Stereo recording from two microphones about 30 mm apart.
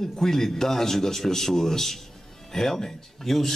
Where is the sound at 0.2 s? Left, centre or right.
Centre.